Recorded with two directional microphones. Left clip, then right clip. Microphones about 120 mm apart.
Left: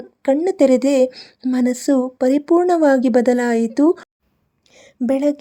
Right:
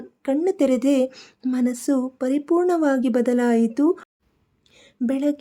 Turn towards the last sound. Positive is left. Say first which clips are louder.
# left 5 dB
turn(degrees=35)  # may be behind; listen again after turning